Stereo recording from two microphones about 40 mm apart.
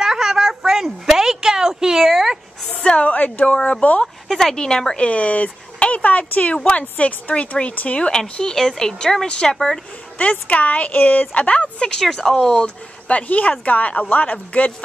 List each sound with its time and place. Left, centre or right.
0.0 s a sound: centre
3.0 s speech: left
4.0 s a sound: centre
4.6 s speech: centre; by 7.4 s left
8.1 s speech: centre
10.2 s speech: left
12.2 s speech: centre
12.5 s speech: left